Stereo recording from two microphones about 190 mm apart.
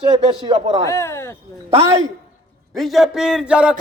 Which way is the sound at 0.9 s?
15° left (ahead or behind).